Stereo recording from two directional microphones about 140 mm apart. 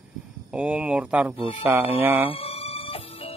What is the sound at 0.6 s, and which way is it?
Speech, 10° right (ahead or behind).